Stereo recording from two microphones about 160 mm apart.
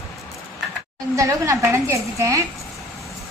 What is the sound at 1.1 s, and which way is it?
A woman's voice, 20° right (ahead or behind).